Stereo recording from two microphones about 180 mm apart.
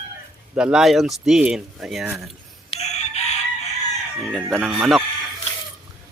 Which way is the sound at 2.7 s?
40° left (ahead or behind).